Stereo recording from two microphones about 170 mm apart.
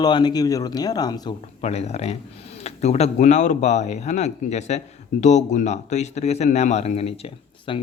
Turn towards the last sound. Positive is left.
turn(degrees=35)  # may be behind; listen again after turning